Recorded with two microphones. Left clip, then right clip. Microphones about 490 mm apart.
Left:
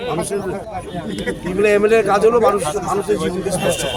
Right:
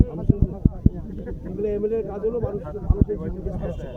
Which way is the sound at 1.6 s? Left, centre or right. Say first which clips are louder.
Left 12 dB; centre.